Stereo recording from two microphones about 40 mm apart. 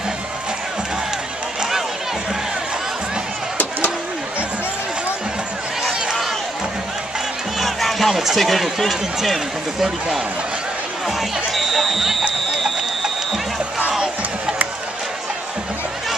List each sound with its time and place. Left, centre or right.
7.5 s run: centre
8.3 s speech: centre
11.1 s music: centre
13.7 s crowd: centre